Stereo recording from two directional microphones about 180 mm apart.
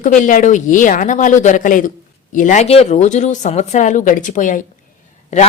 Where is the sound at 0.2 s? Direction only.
45° left (ahead or behind).